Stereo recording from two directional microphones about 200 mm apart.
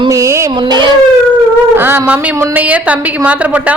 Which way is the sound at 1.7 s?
10° right (ahead or behind).